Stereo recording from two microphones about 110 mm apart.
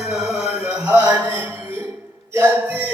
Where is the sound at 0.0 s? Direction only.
5° right (ahead or behind); by 1.9 s 20° right (ahead or behind).